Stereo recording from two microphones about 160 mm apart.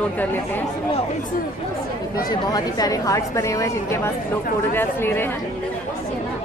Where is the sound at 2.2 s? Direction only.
25° left (ahead or behind).